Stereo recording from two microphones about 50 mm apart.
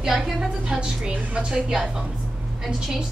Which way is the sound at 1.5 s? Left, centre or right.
Centre.